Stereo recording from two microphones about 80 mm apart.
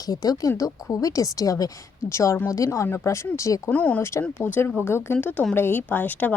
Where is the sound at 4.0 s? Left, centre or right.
Left.